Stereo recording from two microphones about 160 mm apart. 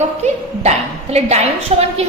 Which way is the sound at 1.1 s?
40° right (ahead or behind).